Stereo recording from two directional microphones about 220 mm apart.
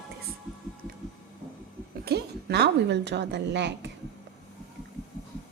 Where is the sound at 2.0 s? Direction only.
45° right (ahead or behind).